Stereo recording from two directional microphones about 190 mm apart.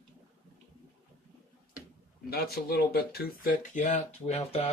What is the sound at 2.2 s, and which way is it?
Speech, 55° left (ahead or behind).